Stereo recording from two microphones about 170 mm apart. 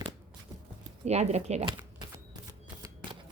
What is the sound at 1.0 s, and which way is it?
Speech, 40° right (ahead or behind).